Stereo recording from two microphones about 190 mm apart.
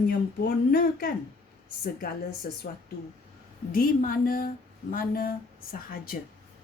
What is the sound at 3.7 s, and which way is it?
Speech, 50° left (ahead or behind).